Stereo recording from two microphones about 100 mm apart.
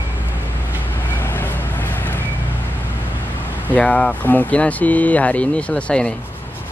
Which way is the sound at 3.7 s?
10° left (ahead or behind).